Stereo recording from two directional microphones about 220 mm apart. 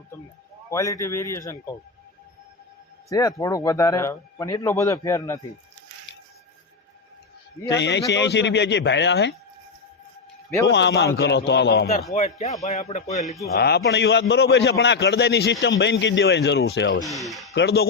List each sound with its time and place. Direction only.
0.7 s speech: 15° left (ahead or behind)
3.1 s speech: 15° left (ahead or behind)
7.8 s a man's voice: 50° left (ahead or behind)
10.7 s a man's voice: 50° left (ahead or behind)
12.1 s a man's voice: 30° left (ahead or behind)
13.6 s a man's voice: 45° left (ahead or behind)
17.0 s speech: centre (ahead or behind)
17.5 s speech: 50° left (ahead or behind)